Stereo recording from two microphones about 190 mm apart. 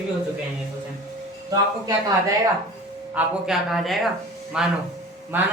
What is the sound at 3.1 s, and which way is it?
A woman's voice, 5° right (ahead or behind).